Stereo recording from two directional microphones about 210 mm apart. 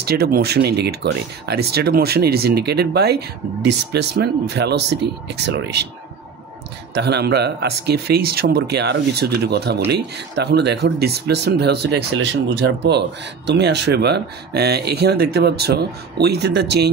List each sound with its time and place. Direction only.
0.0 s speech: 45° right (ahead or behind)
7.0 s speech: 50° right (ahead or behind)